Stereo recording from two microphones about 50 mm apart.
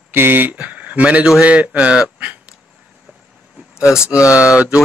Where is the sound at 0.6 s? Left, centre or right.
Right.